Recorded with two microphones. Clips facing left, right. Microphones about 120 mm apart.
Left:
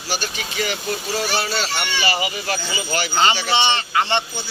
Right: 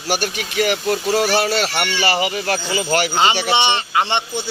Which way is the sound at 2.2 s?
50° right (ahead or behind).